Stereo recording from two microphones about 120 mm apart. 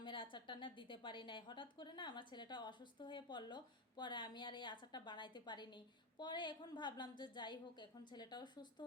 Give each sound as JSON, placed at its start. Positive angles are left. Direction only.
{"t": 0.0, "sound": "a woman's voice", "side_deg": 45}